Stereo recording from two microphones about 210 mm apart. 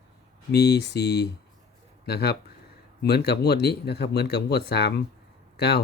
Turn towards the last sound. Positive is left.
turn(degrees=50)  # may be behind; listen again after turning